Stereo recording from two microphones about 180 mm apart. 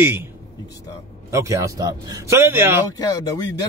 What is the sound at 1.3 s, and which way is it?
A man's voice, 15° right (ahead or behind).